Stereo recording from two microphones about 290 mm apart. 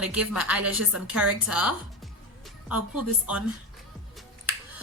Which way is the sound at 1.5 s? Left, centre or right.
Right.